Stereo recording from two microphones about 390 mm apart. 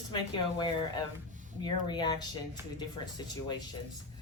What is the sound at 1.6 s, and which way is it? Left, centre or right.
Speech, centre.